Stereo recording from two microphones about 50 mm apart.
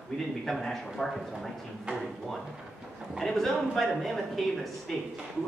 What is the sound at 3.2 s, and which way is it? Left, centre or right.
Speech, centre.